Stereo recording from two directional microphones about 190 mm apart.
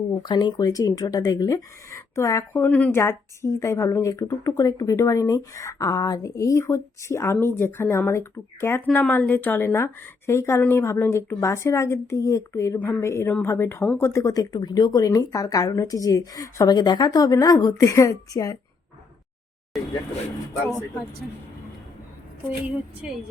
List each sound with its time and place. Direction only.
0.1 s speech: 25° left (ahead or behind)